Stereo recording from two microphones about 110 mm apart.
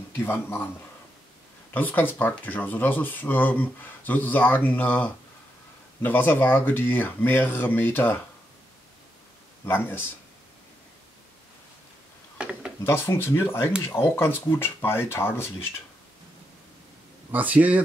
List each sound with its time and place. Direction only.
0.2 s speech: 20° left (ahead or behind)
1.7 s speech: 15° left (ahead or behind)
9.7 s speech: 20° left (ahead or behind)
12.4 s a sound: 10° right (ahead or behind)
12.8 s speech: 20° left (ahead or behind)
17.3 s speech: 15° right (ahead or behind)